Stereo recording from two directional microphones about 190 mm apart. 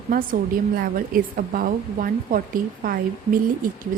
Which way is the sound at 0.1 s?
45° right (ahead or behind).